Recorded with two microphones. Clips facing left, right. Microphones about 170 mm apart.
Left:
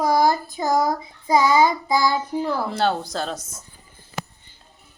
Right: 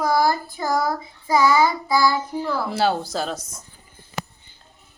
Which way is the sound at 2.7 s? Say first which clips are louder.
Right 1 dB; 5° right (ahead or behind).